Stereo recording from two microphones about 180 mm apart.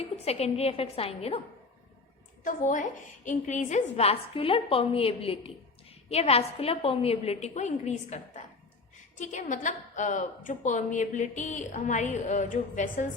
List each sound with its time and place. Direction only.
0.3 s a woman's voice: 35° left (ahead or behind)
2.4 s a woman's voice: 50° left (ahead or behind)